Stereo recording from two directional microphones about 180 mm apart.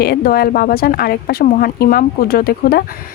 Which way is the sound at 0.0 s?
60° left (ahead or behind).